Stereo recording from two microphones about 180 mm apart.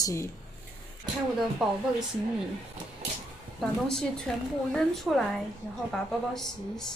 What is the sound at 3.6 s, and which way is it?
Speech, centre (ahead or behind).